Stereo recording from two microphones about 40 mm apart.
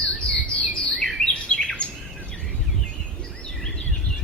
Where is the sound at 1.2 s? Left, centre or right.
Left.